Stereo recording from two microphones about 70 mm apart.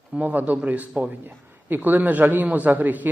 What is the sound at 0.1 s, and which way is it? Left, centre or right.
A man's voice, right.